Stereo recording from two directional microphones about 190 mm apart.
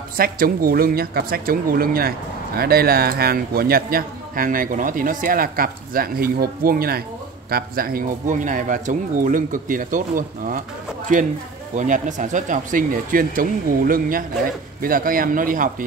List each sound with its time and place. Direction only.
0.2 s speech: 50° right (ahead or behind)
11.7 s speech: 40° right (ahead or behind)